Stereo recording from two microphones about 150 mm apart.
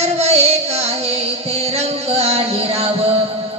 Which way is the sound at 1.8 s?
45° right (ahead or behind).